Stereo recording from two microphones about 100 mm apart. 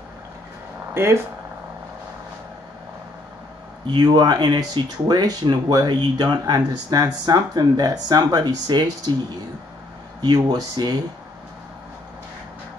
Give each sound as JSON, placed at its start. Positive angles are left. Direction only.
{"t": 0.9, "sound": "speech", "side_deg": -25}
{"t": 3.8, "sound": "speech", "side_deg": -45}
{"t": 10.2, "sound": "speech", "side_deg": -40}